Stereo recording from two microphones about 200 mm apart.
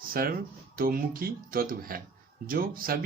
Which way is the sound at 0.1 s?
45° right (ahead or behind).